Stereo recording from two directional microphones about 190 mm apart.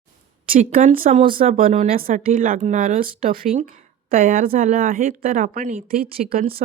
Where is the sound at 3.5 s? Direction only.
40° right (ahead or behind).